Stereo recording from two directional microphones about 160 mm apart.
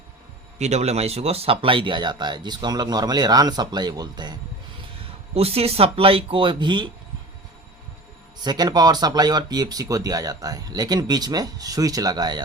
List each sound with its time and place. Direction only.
0.6 s speech: 45° right (ahead or behind); by 4.4 s 25° right (ahead or behind)
5.3 s speech: 40° right (ahead or behind)
8.4 s speech: 25° right (ahead or behind)